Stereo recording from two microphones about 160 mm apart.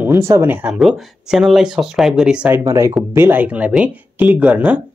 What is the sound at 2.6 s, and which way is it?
Speech, 20° right (ahead or behind).